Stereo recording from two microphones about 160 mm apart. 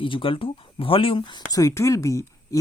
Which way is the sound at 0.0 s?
30° left (ahead or behind).